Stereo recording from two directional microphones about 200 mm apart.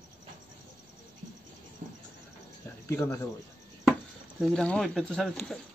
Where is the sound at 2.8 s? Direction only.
10° left (ahead or behind).